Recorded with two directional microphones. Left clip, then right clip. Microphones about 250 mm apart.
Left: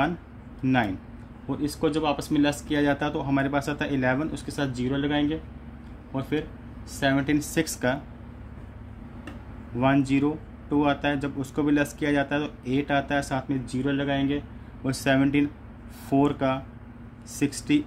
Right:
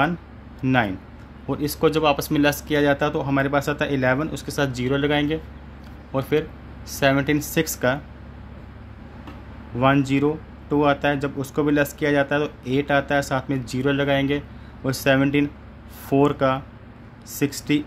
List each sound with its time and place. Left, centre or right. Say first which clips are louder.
0.6 s speech: right 4 dB; centre
7.0 s speech: right 5 dB; centre
9.8 s speech: right 4 dB; centre